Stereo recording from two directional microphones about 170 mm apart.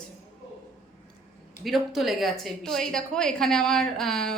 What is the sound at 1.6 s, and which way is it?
A woman's voice, centre (ahead or behind).